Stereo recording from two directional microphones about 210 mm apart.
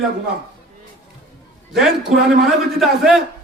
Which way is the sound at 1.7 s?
Centre (ahead or behind).